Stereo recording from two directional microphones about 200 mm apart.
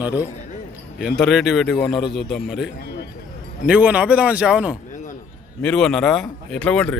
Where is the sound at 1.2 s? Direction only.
Centre (ahead or behind).